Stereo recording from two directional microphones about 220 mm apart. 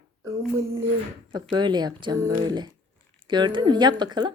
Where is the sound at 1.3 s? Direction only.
20° right (ahead or behind).